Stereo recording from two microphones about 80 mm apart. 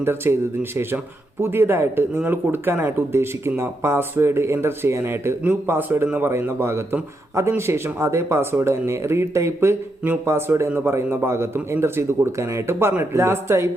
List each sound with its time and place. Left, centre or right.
0.0 s speech: right